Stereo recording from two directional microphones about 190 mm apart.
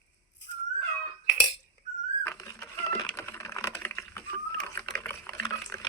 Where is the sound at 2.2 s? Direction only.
15° left (ahead or behind).